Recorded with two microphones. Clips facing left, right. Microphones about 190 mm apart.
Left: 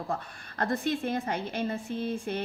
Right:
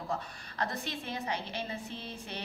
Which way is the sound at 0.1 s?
50° left (ahead or behind).